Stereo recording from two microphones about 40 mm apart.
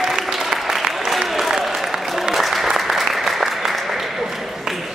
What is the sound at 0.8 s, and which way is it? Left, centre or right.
Applause, centre.